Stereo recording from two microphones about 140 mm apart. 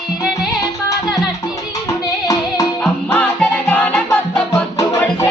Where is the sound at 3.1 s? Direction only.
10° left (ahead or behind).